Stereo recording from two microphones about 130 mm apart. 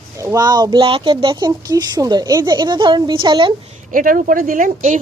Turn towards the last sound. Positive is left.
turn(degrees=-85)